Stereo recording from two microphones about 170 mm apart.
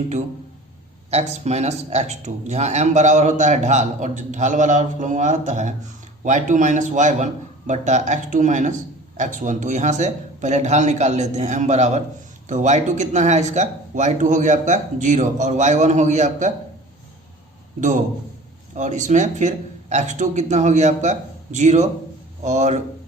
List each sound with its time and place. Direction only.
1.1 s a man's voice: 40° right (ahead or behind)
17.7 s a man's voice: 50° right (ahead or behind)